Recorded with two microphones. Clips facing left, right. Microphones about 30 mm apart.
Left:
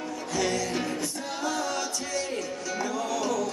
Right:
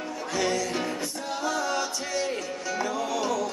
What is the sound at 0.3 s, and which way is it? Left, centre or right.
Music, centre.